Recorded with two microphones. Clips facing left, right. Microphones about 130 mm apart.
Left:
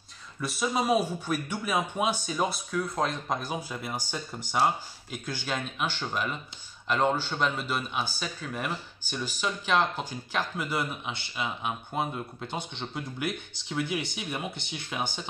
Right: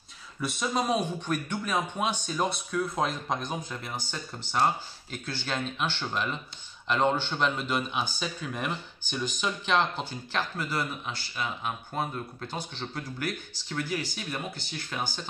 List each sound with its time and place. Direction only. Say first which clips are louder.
0.4 s speech: left 1 dB; 5° left (ahead or behind)